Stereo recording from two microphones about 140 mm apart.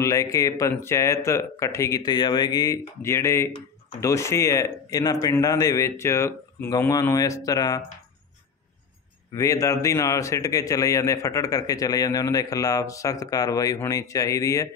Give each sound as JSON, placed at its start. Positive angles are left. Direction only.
{"t": 0.0, "sound": "a man's voice", "side_deg": 20}
{"t": 9.3, "sound": "a man's voice", "side_deg": 25}